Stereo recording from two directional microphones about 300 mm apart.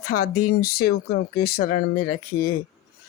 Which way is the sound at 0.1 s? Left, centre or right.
Left.